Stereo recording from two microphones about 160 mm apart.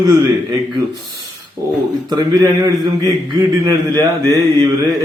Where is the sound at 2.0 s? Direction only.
25° right (ahead or behind).